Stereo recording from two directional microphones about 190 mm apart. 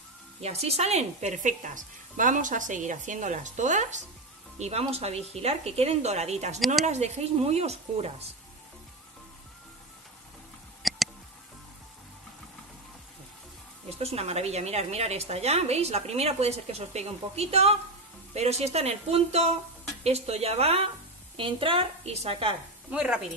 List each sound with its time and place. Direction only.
0.4 s a woman's voice: 35° right (ahead or behind)
6.6 s speech: centre (ahead or behind)
6.9 s a woman's voice: 35° right (ahead or behind)
10.8 s a sound: centre (ahead or behind)
13.8 s a woman's voice: 30° right (ahead or behind)
22.8 s speech: 5° right (ahead or behind)